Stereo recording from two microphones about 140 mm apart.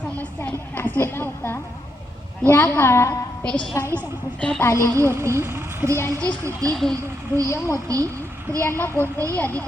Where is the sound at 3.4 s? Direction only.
10° left (ahead or behind).